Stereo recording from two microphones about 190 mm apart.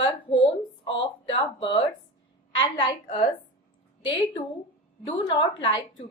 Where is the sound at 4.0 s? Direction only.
25° left (ahead or behind).